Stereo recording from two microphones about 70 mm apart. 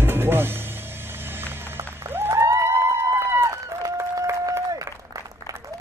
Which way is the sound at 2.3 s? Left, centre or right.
Right.